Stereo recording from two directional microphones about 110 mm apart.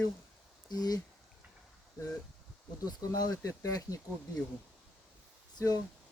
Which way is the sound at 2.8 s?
40° left (ahead or behind).